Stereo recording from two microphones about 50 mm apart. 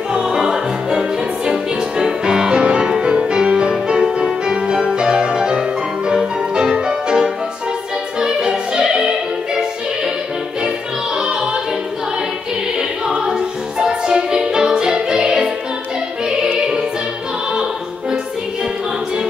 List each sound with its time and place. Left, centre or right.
0.1 s music: centre
11.1 s music: centre
13.2 s music: centre